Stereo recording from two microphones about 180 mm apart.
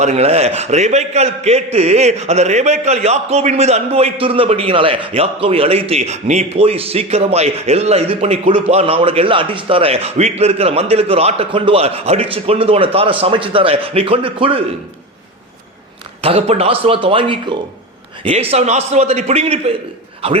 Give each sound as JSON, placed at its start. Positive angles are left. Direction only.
{"t": 0.0, "sound": "a man's voice", "side_deg": -35}
{"t": 16.2, "sound": "a man's voice", "side_deg": -35}